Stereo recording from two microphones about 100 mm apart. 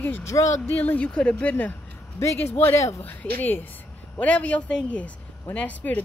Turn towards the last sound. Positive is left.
turn(degrees=15)  # may be behind; listen again after turning